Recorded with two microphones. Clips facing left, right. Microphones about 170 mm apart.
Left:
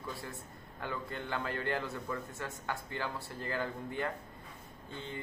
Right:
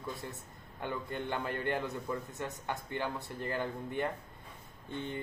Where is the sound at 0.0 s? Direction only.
20° right (ahead or behind).